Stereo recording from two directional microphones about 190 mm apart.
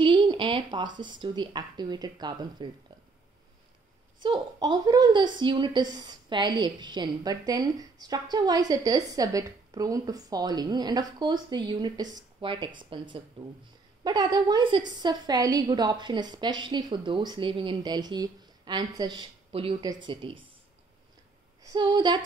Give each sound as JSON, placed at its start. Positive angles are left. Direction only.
{"t": 0.0, "sound": "speech", "side_deg": -25}
{"t": 4.2, "sound": "a woman's voice", "side_deg": -25}
{"t": 21.6, "sound": "a woman's voice", "side_deg": -25}